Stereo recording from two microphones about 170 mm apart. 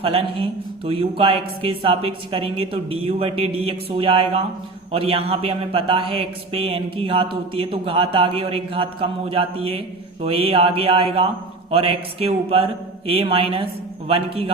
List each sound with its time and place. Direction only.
0.0 s a man's voice: 35° right (ahead or behind)